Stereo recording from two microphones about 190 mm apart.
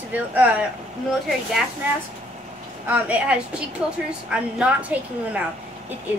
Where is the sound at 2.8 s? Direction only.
10° right (ahead or behind).